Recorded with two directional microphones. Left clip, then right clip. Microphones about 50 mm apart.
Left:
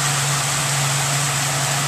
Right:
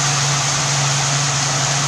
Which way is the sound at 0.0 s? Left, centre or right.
Centre.